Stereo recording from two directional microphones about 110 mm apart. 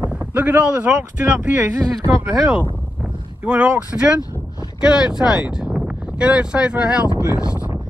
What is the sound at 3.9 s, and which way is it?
Speech, 15° right (ahead or behind).